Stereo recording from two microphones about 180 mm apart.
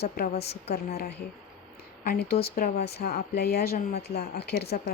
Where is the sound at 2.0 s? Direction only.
55° left (ahead or behind).